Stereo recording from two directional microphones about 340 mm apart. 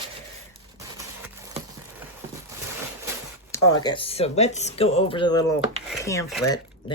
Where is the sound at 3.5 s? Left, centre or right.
Centre.